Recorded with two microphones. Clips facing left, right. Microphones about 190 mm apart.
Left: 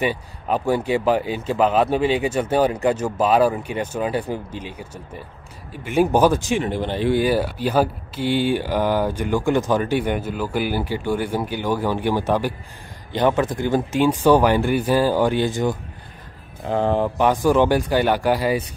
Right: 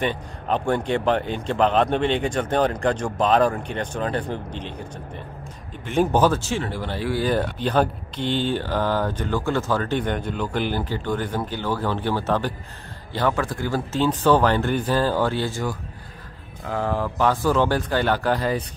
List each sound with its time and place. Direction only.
0.0 s speech: 5° left (ahead or behind)
7.2 s speech: 5° left (ahead or behind)